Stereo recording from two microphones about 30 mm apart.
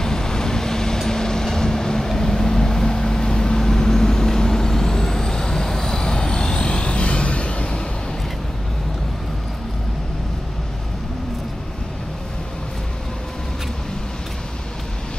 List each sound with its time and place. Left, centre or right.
0.0 s vehicle: left